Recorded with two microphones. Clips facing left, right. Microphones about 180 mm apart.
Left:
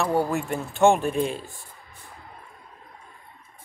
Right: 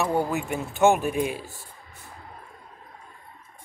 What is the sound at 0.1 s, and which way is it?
Speech, centre (ahead or behind).